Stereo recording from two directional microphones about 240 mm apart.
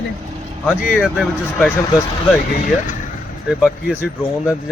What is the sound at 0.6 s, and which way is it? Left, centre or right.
Speech, centre.